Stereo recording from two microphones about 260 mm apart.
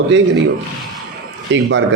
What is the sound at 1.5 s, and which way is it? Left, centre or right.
Speech, right.